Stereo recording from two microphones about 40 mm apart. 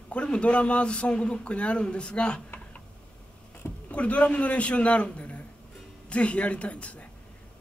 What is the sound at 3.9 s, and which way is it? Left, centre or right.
Speech, left.